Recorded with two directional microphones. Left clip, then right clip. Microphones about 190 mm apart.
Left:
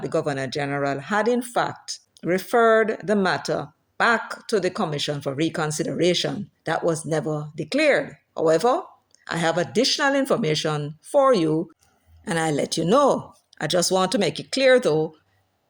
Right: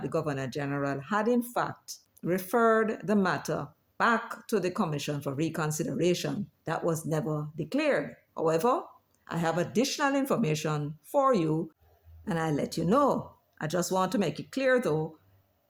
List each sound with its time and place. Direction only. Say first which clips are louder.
0.0 s speech: left 7 dB; 20° left (ahead or behind)